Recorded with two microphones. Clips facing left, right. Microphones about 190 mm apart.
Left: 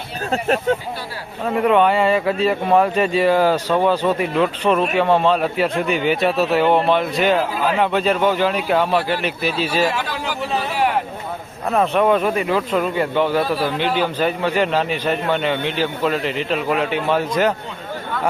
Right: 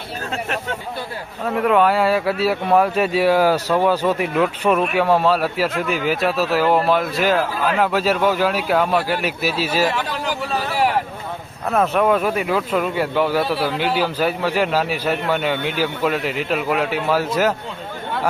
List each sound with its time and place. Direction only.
0.3 s speech: 35° left (ahead or behind)
1.5 s speech: 5° left (ahead or behind)
11.7 s speech: centre (ahead or behind)